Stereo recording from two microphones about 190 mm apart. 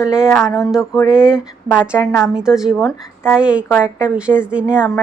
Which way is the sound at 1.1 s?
5° right (ahead or behind).